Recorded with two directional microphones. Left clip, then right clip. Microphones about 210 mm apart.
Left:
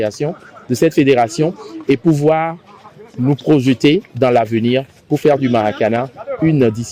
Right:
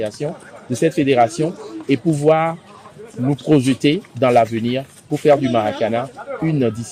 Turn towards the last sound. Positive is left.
turn(degrees=50)  # may be behind; listen again after turning